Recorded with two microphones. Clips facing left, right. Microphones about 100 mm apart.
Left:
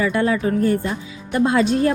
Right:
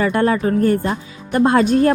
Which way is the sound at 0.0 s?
50° right (ahead or behind).